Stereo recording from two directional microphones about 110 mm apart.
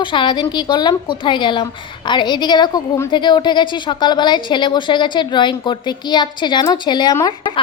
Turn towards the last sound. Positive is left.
turn(degrees=40)  # may be behind; listen again after turning